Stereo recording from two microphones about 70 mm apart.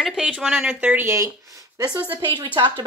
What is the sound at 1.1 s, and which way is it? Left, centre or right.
Speech, right.